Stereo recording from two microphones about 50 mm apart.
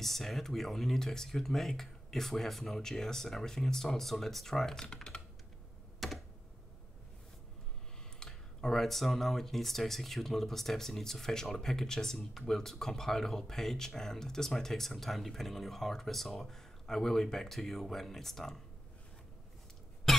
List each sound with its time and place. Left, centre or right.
0.0 s speech: centre
6.0 s computer keyboard: centre
8.2 s speech: centre
20.1 s cough: centre